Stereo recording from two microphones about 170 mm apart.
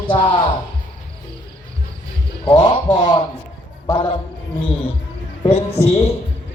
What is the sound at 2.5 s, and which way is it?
A man's voice, 30° left (ahead or behind).